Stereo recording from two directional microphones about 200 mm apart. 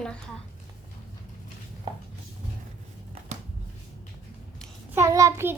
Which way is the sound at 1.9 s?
25° right (ahead or behind).